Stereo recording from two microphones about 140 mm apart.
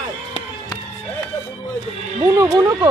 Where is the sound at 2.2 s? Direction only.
30° right (ahead or behind).